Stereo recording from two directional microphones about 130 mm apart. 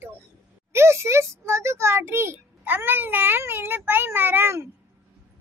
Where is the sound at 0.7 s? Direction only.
20° right (ahead or behind).